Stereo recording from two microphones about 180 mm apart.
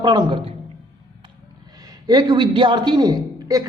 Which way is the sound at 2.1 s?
25° right (ahead or behind).